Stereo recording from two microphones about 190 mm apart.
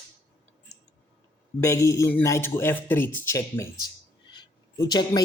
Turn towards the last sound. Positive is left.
turn(degrees=20)  # may be behind; listen again after turning